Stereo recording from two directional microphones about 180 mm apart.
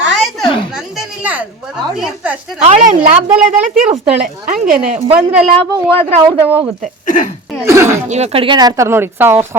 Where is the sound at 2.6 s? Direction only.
40° right (ahead or behind).